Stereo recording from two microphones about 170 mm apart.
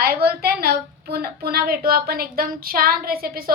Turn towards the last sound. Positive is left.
turn(degrees=-60)  # may be behind; listen again after turning